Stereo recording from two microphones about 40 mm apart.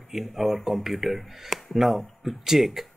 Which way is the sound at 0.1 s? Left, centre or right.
Centre.